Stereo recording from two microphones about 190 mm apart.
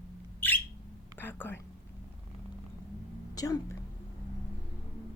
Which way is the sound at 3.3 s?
20° left (ahead or behind).